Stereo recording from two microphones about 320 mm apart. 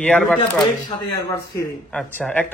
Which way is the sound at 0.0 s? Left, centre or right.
Centre.